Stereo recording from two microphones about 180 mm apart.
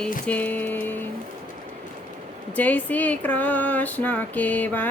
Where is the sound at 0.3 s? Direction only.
10° left (ahead or behind).